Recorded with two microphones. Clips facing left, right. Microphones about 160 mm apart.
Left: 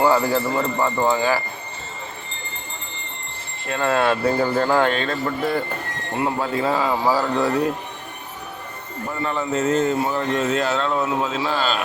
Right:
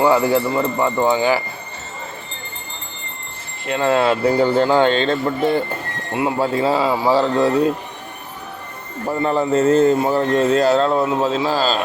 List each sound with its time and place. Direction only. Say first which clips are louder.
0.1 s speech: right 3 dB; 25° right (ahead or behind)
3.7 s speech: right 3 dB; 25° right (ahead or behind)
9.0 s a man's voice: right 7 dB; 35° right (ahead or behind)